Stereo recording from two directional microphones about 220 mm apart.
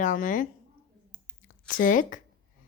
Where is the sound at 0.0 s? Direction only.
35° left (ahead or behind).